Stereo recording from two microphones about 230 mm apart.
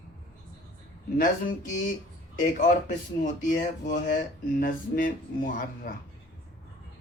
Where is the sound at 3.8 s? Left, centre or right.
Left.